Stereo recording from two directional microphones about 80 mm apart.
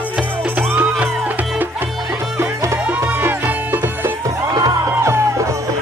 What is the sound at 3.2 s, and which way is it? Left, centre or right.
Music, right.